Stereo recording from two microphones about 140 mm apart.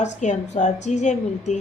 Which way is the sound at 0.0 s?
60° left (ahead or behind).